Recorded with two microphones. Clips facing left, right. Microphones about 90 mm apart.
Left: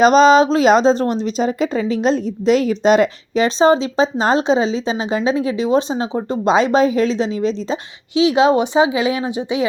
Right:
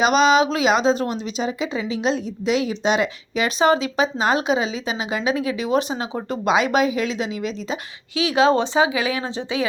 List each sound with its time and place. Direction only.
0.0 s speech: 35° left (ahead or behind)
8.1 s speech: 20° left (ahead or behind)